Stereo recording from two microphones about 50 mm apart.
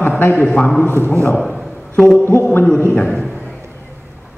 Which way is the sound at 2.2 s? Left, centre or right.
Left.